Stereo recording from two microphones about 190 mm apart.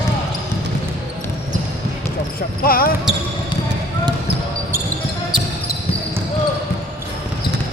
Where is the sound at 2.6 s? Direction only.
50° left (ahead or behind).